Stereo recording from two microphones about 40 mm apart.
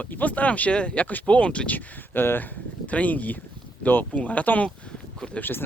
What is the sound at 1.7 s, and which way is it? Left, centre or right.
Speech, left.